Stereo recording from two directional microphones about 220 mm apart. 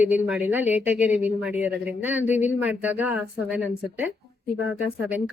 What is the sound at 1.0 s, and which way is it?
Speech, 30° left (ahead or behind).